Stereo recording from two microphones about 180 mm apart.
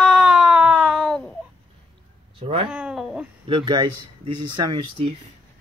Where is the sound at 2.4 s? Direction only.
30° right (ahead or behind).